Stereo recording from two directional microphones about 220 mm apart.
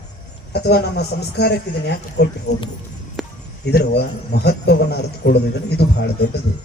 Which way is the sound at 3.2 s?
Centre (ahead or behind).